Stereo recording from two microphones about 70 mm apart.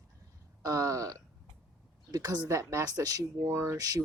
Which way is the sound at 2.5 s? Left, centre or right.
Right.